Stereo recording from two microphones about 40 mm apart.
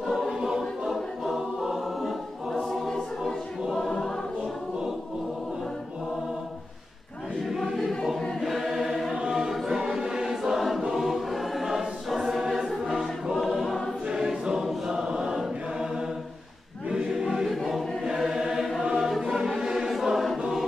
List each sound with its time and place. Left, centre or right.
0.0 s choir: centre
0.3 s choir: centre
2.7 s choir: centre
7.4 s choir: centre
9.1 s choir: centre
13.4 s choir: centre
14.0 s choir: centre